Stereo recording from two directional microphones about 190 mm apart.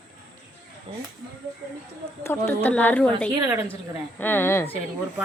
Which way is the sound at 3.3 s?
15° right (ahead or behind).